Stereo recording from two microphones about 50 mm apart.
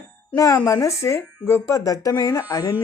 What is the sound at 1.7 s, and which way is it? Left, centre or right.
Speech, left.